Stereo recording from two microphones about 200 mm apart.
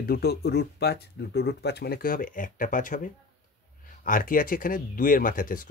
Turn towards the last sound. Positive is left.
turn(degrees=45)  # may be behind; listen again after turning